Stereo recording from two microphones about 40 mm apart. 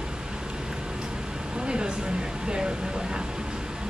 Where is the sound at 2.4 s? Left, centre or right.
Right.